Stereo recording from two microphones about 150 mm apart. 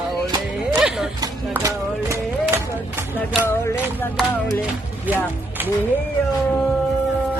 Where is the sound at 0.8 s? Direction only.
5° right (ahead or behind).